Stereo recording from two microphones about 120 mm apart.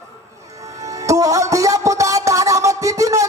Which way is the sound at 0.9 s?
25° right (ahead or behind).